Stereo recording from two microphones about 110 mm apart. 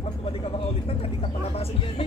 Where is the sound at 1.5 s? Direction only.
65° left (ahead or behind).